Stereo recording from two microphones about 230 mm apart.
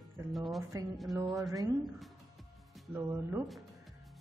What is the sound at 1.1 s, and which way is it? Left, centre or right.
Speech, centre.